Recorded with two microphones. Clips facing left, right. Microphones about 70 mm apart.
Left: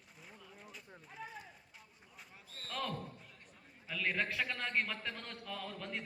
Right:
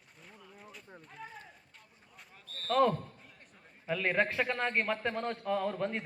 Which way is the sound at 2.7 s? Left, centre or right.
Right.